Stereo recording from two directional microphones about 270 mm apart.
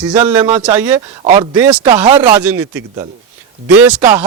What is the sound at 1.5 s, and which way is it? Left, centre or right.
A man's voice, centre.